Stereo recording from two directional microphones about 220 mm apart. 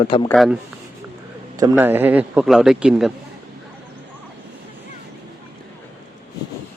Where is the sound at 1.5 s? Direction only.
15° right (ahead or behind).